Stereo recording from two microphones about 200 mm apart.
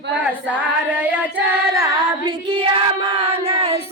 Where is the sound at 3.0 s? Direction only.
25° right (ahead or behind).